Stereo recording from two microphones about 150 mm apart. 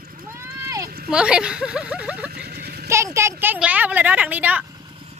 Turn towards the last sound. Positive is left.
turn(degrees=-10)  # may be behind; listen again after turning